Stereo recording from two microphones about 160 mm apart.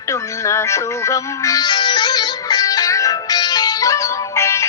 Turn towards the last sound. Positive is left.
turn(degrees=20)  # may be behind; listen again after turning